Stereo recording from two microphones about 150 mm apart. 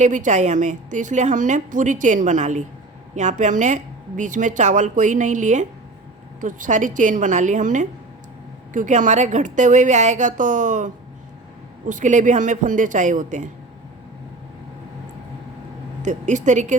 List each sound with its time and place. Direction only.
0.0 s a woman's voice: 55° right (ahead or behind)
16.0 s a woman's voice: 55° right (ahead or behind)